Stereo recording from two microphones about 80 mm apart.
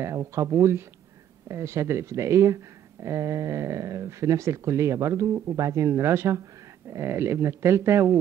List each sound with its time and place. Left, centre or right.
0.0 s speech: right